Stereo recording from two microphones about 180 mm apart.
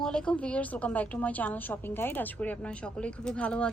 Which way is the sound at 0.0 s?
5° left (ahead or behind).